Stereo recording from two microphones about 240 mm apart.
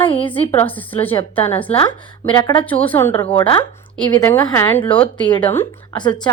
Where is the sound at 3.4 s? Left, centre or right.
Left.